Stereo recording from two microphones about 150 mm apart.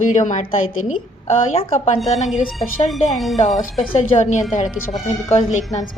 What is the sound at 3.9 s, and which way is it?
Speech, 50° left (ahead or behind).